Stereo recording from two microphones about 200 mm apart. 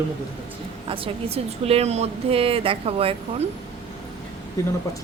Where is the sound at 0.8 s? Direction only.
25° right (ahead or behind).